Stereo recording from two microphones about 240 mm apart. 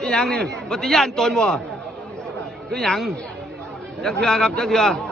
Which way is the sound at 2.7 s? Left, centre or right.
Centre.